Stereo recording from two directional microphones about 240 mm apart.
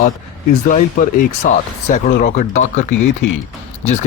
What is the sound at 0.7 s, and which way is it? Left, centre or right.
Speech, left.